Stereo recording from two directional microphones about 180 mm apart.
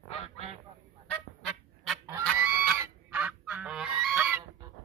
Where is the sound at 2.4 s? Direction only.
10° right (ahead or behind).